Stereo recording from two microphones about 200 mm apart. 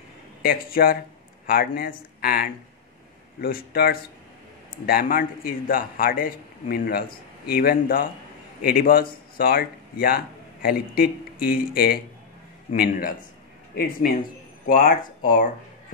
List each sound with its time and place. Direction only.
0.4 s speech: 45° left (ahead or behind)
14.7 s speech: 45° left (ahead or behind)